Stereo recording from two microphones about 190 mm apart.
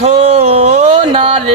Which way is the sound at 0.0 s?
30° right (ahead or behind).